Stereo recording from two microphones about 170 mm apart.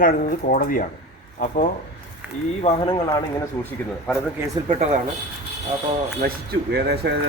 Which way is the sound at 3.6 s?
10° left (ahead or behind).